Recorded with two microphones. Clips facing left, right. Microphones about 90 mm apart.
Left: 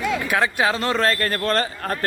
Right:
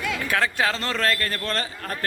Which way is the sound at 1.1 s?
40° left (ahead or behind).